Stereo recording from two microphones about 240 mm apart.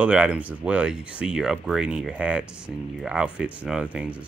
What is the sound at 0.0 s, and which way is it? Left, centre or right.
Speech, centre.